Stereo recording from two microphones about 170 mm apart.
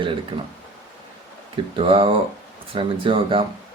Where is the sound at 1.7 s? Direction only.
30° right (ahead or behind).